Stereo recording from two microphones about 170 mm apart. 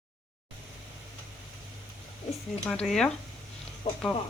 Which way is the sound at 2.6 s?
5° left (ahead or behind).